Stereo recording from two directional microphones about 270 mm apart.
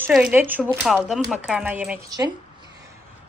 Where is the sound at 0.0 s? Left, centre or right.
Centre.